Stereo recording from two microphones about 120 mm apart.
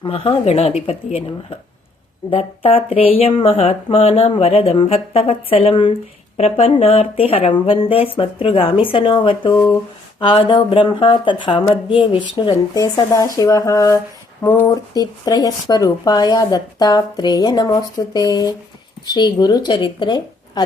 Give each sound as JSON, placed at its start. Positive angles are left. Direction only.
{"t": 0.0, "sound": "speech", "side_deg": 50}
{"t": 6.3, "sound": "speech", "side_deg": 60}
{"t": 12.7, "sound": "speech", "side_deg": 25}
{"t": 14.9, "sound": "speech", "side_deg": 35}